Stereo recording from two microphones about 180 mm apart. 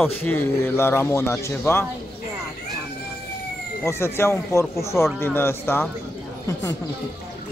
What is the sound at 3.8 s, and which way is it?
Speech, 15° left (ahead or behind).